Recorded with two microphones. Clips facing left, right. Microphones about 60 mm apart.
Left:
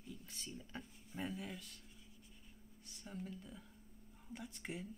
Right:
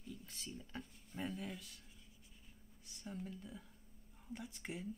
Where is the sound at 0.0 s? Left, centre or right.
Centre.